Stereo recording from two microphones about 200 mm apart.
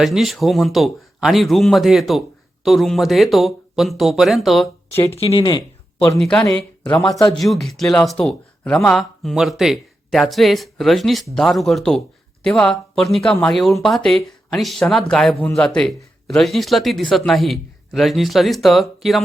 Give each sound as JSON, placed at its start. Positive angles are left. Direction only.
{"t": 0.0, "sound": "a man's voice", "side_deg": 0}
{"t": 5.0, "sound": "speech", "side_deg": 30}
{"t": 6.1, "sound": "a man's voice", "side_deg": 5}